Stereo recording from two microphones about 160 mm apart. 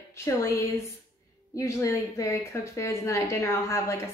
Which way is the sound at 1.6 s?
20° left (ahead or behind).